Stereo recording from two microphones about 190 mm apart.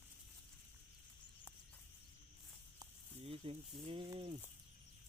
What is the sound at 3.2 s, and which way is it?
Speech, 30° right (ahead or behind).